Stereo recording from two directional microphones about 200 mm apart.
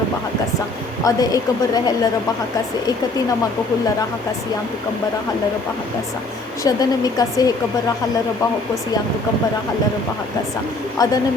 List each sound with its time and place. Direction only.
1.0 s speech: 20° left (ahead or behind)
6.7 s speech: 20° left (ahead or behind)
10.9 s speech: 20° left (ahead or behind)